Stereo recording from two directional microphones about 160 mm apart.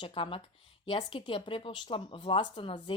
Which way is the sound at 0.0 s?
35° left (ahead or behind).